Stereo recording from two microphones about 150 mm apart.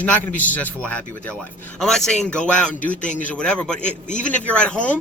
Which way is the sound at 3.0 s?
55° left (ahead or behind).